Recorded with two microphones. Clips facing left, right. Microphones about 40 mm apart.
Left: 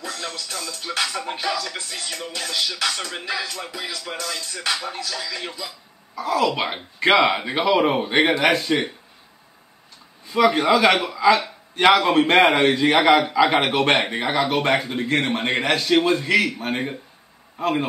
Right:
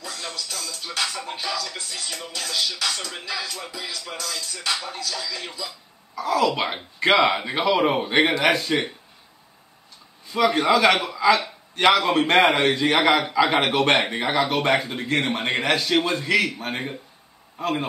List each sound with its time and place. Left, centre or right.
0.0 s music: left
2.2 s speech: centre
3.3 s music: left
3.7 s music: left
4.1 s music: left
5.0 s speech: centre
5.7 s a man's voice: centre
10.2 s a man's voice: centre